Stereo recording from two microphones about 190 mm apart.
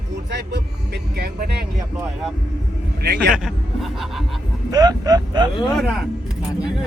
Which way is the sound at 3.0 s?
55° right (ahead or behind).